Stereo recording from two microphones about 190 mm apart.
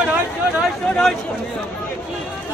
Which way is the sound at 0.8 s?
5° left (ahead or behind).